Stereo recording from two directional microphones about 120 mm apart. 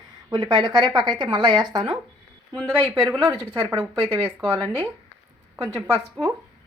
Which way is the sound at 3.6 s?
5° right (ahead or behind).